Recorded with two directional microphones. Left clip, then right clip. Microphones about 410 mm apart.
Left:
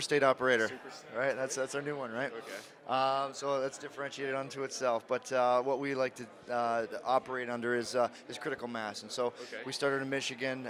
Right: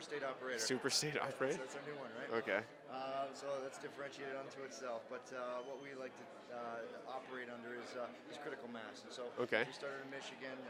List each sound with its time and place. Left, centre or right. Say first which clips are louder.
0.0 s speech: left 16 dB; left
0.6 s speech: left 4 dB; right
1.5 s a man's voice: left 8 dB; left